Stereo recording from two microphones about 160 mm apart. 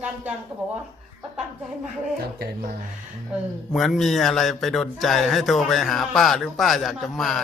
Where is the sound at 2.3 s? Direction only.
70° right (ahead or behind).